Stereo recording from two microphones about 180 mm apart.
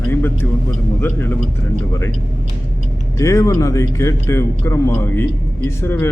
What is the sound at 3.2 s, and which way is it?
A man's voice, 20° left (ahead or behind).